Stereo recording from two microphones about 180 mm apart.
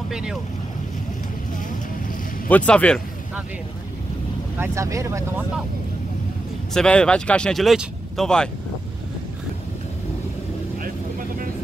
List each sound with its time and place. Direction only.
0.1 s speech: 5° right (ahead or behind)
2.4 s speech: 5° left (ahead or behind)
4.6 s speech: 15° right (ahead or behind)
6.7 s speech: 5° left (ahead or behind)